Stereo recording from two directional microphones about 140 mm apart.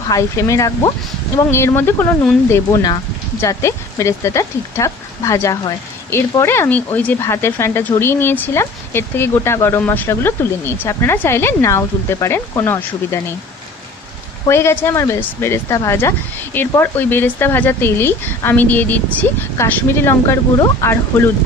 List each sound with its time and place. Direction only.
0.1 s speech: 20° left (ahead or behind)
2.5 s speech: 25° left (ahead or behind)
14.5 s speech: 20° left (ahead or behind)